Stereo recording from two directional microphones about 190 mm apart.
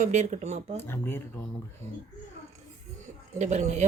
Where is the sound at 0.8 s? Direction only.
10° left (ahead or behind).